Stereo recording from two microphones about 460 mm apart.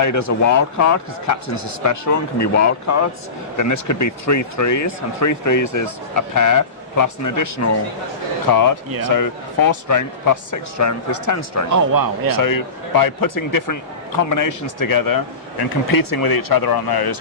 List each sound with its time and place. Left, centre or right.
0.0 s speech: left
11.7 s speech: right
12.3 s speech: left